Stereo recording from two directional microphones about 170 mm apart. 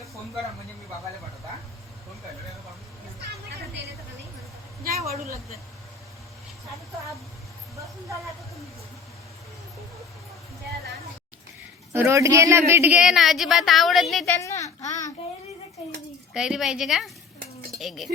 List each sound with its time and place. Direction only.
4.9 s a woman's voice: 40° right (ahead or behind)
11.9 s a woman's voice: 15° right (ahead or behind); by 14.3 s centre (ahead or behind)
14.3 s a sound: 20° left (ahead or behind)
14.8 s child singing: 45° left (ahead or behind)
16.3 s a woman's voice: 5° right (ahead or behind)